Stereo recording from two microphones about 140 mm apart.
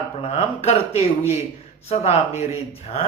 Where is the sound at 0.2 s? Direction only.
50° left (ahead or behind).